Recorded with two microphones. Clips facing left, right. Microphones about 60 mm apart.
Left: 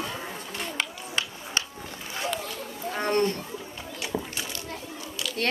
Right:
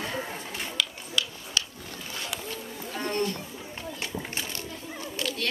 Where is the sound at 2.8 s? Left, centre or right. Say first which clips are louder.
Left 5 dB; left.